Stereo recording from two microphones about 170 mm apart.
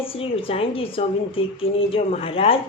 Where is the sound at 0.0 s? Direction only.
35° left (ahead or behind).